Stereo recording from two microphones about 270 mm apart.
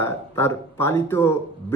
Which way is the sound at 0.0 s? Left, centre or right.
Centre.